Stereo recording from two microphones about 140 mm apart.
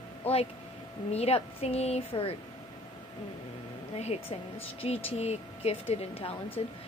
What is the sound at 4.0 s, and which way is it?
A woman's voice, 50° left (ahead or behind).